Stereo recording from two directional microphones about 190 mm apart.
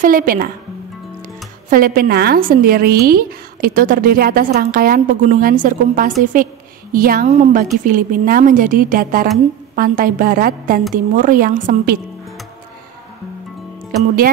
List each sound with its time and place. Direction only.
0.0 s a woman's voice: 50° right (ahead or behind)
1.7 s a woman's voice: 50° right (ahead or behind)
14.0 s a woman's voice: 50° right (ahead or behind)